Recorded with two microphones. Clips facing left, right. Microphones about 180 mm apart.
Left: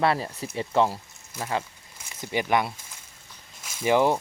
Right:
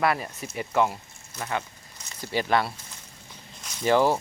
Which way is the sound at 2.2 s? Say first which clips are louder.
Even; 15° left (ahead or behind).